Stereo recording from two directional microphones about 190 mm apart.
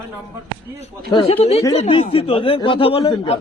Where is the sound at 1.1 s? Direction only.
25° left (ahead or behind).